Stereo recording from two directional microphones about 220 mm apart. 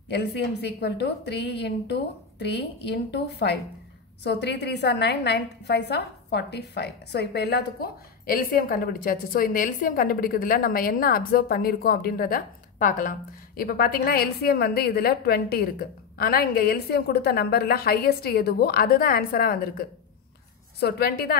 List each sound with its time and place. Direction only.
0.1 s a woman's voice: 50° left (ahead or behind)